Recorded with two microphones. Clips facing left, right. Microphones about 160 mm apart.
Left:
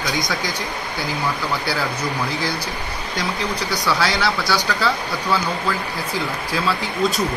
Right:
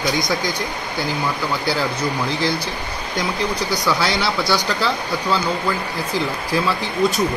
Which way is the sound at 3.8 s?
20° right (ahead or behind).